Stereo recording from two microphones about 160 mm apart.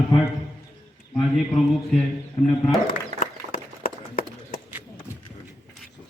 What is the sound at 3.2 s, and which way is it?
Run, 60° left (ahead or behind).